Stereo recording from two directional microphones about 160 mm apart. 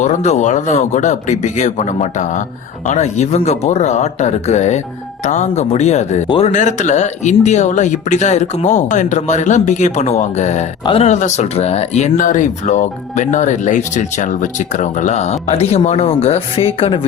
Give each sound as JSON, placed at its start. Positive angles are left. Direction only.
{"t": 0.0, "sound": "speech", "side_deg": 45}
{"t": 6.2, "sound": "speech", "side_deg": 35}
{"t": 6.5, "sound": "speech", "side_deg": 50}